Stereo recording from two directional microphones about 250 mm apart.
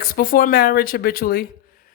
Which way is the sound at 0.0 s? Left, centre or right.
Left.